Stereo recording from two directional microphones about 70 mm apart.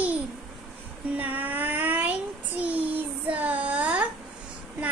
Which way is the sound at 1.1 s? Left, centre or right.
Right.